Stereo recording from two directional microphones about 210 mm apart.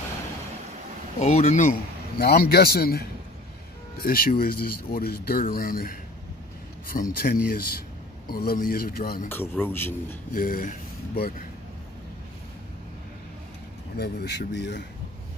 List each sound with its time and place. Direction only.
1.2 s a man's voice: 35° left (ahead or behind)
9.3 s a man's voice: 10° left (ahead or behind)
10.3 s speech: 40° left (ahead or behind)
13.9 s speech: 50° left (ahead or behind)